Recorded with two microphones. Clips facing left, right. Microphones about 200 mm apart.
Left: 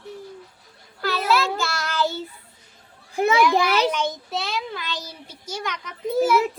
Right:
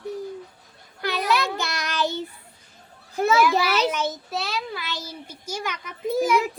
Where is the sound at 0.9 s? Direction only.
15° right (ahead or behind).